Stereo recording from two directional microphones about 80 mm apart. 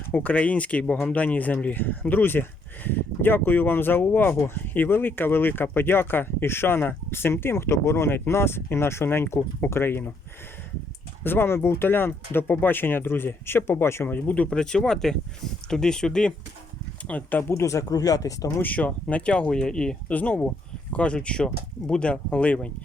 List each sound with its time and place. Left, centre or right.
0.1 s speech: centre
11.2 s speech: left; by 16.3 s centre
17.1 s speech: left
17.5 s speech: left
17.8 s speech: left
18.6 s speech: centre